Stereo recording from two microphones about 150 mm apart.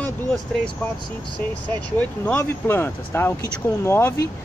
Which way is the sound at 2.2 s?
15° left (ahead or behind).